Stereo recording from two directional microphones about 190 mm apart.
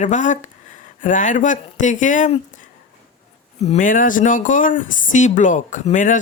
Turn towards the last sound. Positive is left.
turn(degrees=40)  # may be behind; listen again after turning